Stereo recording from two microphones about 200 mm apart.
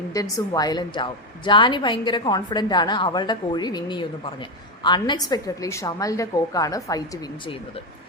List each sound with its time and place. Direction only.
0.1 s a woman's voice: 20° left (ahead or behind)